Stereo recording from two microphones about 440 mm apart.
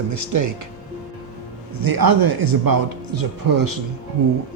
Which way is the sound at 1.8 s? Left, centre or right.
Right.